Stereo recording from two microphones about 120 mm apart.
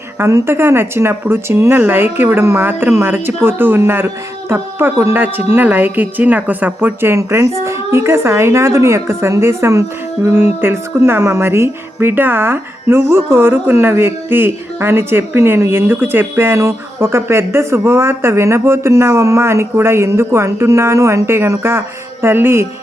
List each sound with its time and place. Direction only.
0.2 s speech: 25° right (ahead or behind)